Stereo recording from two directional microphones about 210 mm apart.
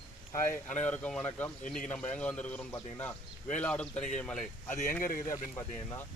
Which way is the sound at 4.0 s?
35° left (ahead or behind).